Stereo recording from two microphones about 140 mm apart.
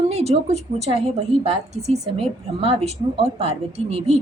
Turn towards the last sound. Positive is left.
turn(degrees=-45)  # may be behind; listen again after turning